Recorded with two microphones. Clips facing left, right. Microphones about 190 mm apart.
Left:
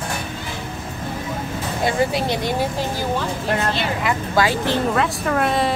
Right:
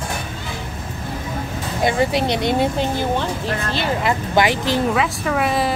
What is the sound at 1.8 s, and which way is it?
Speech, 20° right (ahead or behind).